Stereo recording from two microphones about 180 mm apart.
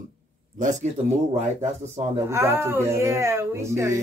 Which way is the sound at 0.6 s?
45° right (ahead or behind).